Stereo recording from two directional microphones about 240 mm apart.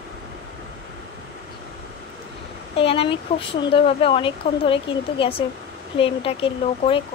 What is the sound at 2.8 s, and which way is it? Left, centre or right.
Speech, left.